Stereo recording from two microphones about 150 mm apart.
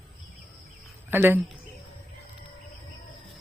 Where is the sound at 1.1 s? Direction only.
15° right (ahead or behind).